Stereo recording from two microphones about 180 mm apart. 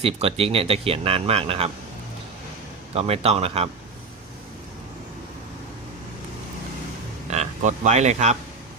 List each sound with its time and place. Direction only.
0.0 s speech: 35° right (ahead or behind)
2.9 s speech: 35° right (ahead or behind)
7.3 s speech: 40° right (ahead or behind)